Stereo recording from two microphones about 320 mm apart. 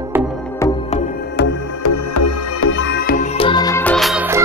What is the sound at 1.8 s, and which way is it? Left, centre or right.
Music, left.